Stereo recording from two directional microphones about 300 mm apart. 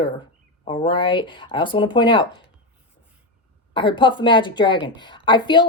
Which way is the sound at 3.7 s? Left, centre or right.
Centre.